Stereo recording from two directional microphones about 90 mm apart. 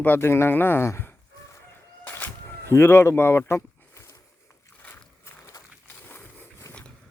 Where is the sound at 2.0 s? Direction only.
25° left (ahead or behind).